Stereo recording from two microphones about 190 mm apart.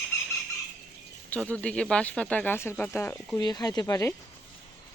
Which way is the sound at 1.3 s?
5° left (ahead or behind).